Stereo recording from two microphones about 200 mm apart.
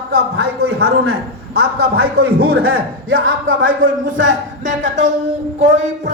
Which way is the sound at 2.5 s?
90° right.